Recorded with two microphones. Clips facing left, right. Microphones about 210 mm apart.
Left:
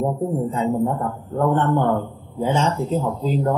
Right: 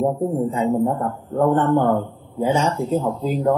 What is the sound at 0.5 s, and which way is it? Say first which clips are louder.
A man's voice: right 1 dB; 15° right (ahead or behind).